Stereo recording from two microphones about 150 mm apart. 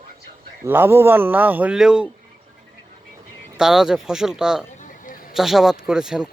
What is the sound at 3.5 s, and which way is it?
Speech, 5° right (ahead or behind).